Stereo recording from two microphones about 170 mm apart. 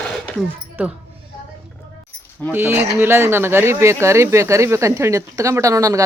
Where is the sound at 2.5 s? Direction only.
10° right (ahead or behind).